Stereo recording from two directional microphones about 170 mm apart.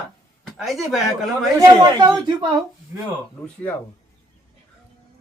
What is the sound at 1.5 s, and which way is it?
Speech, 20° right (ahead or behind).